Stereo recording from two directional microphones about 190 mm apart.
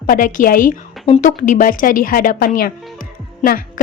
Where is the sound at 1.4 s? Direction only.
45° left (ahead or behind).